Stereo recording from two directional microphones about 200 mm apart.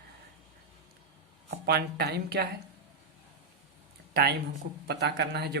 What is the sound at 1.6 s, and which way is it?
Speech, 55° right (ahead or behind).